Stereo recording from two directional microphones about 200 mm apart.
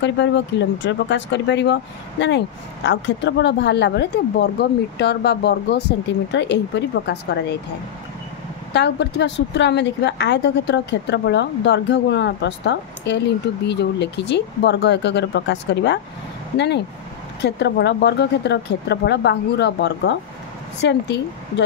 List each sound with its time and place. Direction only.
0.0 s speech: 60° left (ahead or behind)
8.7 s speech: 60° left (ahead or behind)